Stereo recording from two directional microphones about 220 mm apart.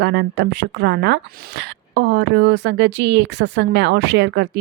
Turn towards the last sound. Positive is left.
turn(degrees=-50)  # may be behind; listen again after turning